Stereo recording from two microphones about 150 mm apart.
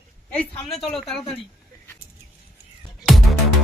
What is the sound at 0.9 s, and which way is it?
Speech, centre (ahead or behind).